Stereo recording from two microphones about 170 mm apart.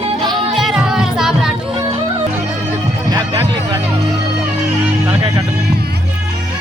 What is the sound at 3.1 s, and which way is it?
Music, 20° right (ahead or behind).